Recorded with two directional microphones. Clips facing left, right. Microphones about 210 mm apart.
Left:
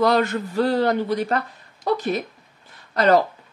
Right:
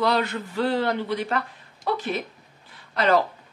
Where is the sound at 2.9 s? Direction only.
40° left (ahead or behind).